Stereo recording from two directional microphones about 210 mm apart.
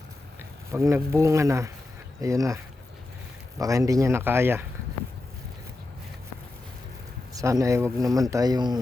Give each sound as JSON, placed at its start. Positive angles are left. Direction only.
{"t": 0.7, "sound": "speech", "side_deg": -15}
{"t": 3.6, "sound": "speech", "side_deg": -15}
{"t": 7.3, "sound": "speech", "side_deg": -15}